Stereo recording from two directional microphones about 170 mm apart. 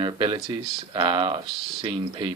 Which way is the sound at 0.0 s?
30° right (ahead or behind).